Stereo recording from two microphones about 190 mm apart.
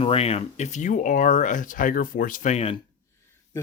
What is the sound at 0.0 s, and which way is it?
Speech, 30° left (ahead or behind).